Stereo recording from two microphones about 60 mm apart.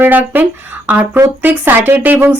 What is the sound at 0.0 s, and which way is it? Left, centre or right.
Speech, right.